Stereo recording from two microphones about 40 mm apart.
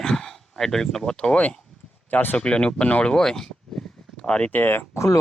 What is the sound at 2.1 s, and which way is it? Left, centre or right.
Speech, left.